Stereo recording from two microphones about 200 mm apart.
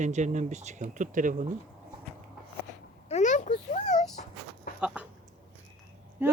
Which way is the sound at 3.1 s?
35° left (ahead or behind).